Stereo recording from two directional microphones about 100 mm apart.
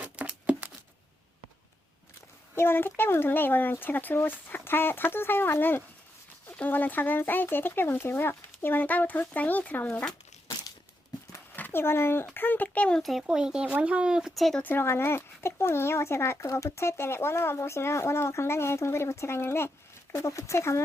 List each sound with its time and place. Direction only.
0.0 s a sound: 15° right (ahead or behind)
2.6 s speech: 20° left (ahead or behind)
11.5 s speech: 20° left (ahead or behind)
13.0 s speech: centre (ahead or behind)
14.6 s speech: 20° left (ahead or behind)